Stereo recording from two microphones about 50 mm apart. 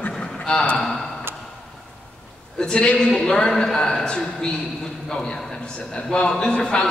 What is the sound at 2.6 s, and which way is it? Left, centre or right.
A man's voice, centre.